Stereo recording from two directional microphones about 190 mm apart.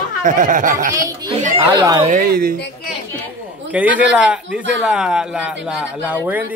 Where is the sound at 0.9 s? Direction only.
15° right (ahead or behind).